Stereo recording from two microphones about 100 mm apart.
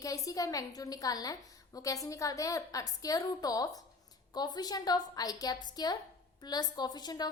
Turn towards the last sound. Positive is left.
turn(degrees=45)  # may be behind; listen again after turning